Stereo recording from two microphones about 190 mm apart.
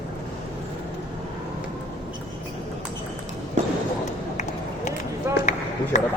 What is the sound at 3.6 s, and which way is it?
Basketball bounce, 40° right (ahead or behind).